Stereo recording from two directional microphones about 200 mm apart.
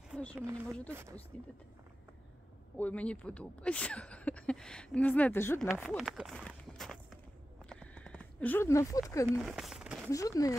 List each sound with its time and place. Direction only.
0.1 s a sound: 5° left (ahead or behind)
1.3 s speech: 5° left (ahead or behind)
2.8 s speech: 5° left (ahead or behind)
5.7 s speech: 5° right (ahead or behind)
7.7 s clip-clop: 5° left (ahead or behind)
9.1 s speech: 15° left (ahead or behind)
9.4 s speech: centre (ahead or behind)
10.0 s speech: 15° left (ahead or behind)